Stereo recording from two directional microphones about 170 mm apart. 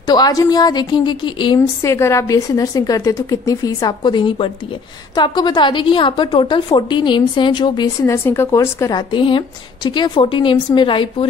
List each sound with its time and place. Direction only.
0.0 s a woman's voice: 25° left (ahead or behind)
8.0 s a woman's voice: 15° left (ahead or behind); by 11.2 s 30° left (ahead or behind)